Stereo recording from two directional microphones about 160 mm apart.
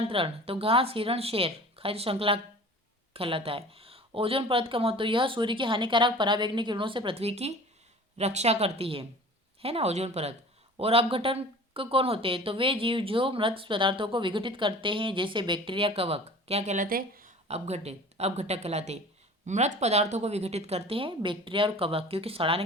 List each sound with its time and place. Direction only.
0.1 s speech: 35° right (ahead or behind); by 17.3 s 60° right (ahead or behind)
17.5 s speech: 40° right (ahead or behind)